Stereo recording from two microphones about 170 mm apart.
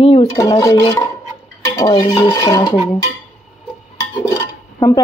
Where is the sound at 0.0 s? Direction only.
35° left (ahead or behind).